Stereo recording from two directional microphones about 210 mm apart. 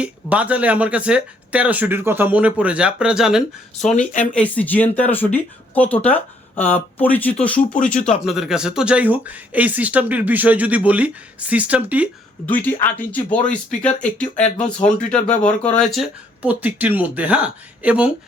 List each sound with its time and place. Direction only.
0.0 s speech: 5° right (ahead or behind)
3.8 s speech: 35° left (ahead or behind)
4.4 s speech: 5° left (ahead or behind)
12.5 s speech: 10° left (ahead or behind)
15.3 s speech: 35° left (ahead or behind)
15.7 s speech: centre (ahead or behind)